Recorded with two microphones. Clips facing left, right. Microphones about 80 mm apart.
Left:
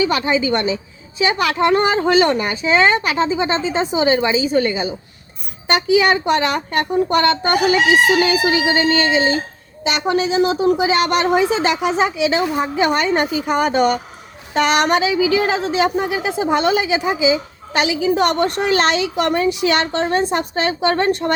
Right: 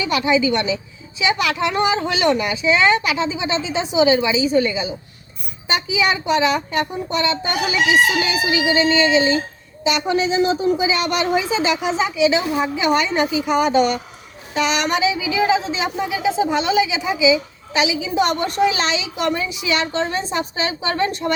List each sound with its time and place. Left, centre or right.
0.0 s speech: left
5.6 s a woman's voice: left